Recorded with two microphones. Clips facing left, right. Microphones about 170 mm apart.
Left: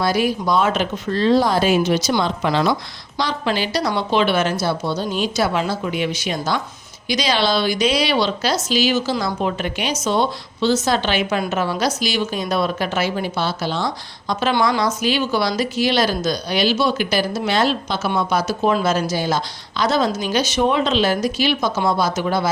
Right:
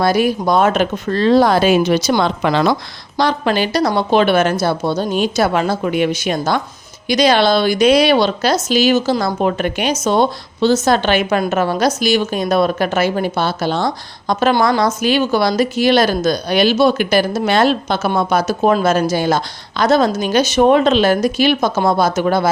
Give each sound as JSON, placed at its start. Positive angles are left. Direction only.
{"t": 0.0, "sound": "a woman's voice", "side_deg": -50}